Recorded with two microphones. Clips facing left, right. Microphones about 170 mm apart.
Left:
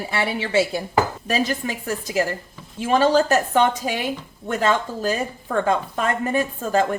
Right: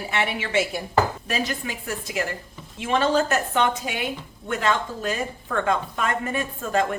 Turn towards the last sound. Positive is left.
turn(degrees=35)  # may be behind; listen again after turning